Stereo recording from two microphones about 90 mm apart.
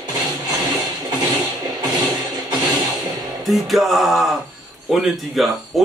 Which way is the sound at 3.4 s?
Centre (ahead or behind).